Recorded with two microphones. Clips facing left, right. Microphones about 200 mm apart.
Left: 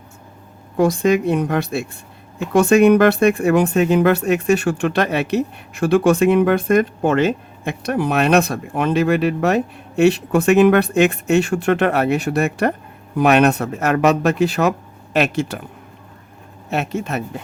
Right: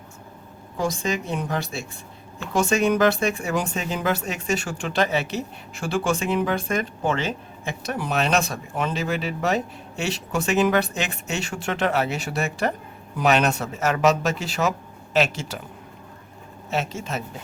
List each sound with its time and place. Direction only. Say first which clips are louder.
0.8 s speech: left 10 dB; 60° left (ahead or behind)
16.6 s speech: left 5 dB; 60° left (ahead or behind)